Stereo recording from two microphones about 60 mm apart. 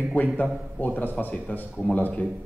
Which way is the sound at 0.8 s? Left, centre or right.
Left.